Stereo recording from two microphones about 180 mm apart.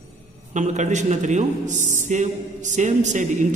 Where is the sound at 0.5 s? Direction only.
40° right (ahead or behind).